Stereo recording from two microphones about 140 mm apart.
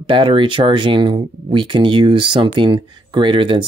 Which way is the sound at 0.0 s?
35° right (ahead or behind).